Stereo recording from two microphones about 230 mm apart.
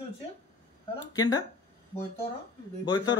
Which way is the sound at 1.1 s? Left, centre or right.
Centre.